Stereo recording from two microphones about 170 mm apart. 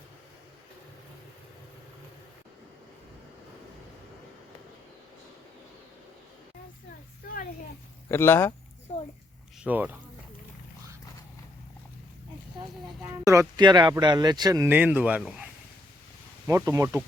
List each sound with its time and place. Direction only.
7.2 s a sound: 60° left (ahead or behind)
8.1 s speech: 15° left (ahead or behind)
9.6 s a man's voice: 10° right (ahead or behind)
13.0 s a man's voice: 15° right (ahead or behind)
16.5 s a man's voice: 20° right (ahead or behind)